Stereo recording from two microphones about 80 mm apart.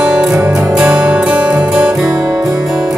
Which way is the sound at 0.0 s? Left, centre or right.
Centre.